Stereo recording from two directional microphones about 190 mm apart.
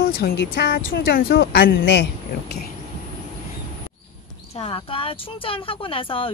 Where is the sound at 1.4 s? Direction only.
65° left (ahead or behind).